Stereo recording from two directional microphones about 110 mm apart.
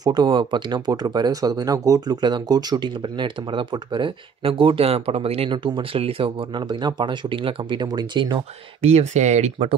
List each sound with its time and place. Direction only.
0.0 s speech: 40° right (ahead or behind)
8.8 s speech: 90° right